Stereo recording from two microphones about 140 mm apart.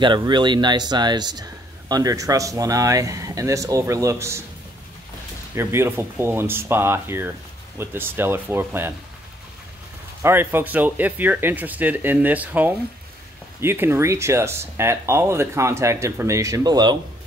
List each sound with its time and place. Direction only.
0.0 s speech: 35° right (ahead or behind)
5.5 s speech: 20° right (ahead or behind)
10.2 s speech: 15° right (ahead or behind)